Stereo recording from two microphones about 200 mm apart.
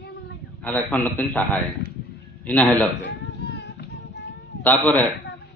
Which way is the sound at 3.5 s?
55° left (ahead or behind).